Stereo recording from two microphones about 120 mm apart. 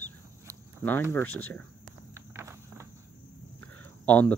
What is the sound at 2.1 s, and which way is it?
Walk, 25° right (ahead or behind).